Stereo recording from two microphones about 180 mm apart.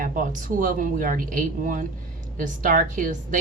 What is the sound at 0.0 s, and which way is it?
A woman's voice, 50° right (ahead or behind).